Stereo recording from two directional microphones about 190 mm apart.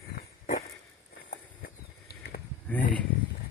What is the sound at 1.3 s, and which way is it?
Horse, 50° left (ahead or behind).